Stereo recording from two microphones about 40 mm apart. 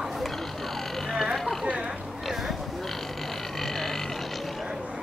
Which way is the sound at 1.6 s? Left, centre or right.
Right.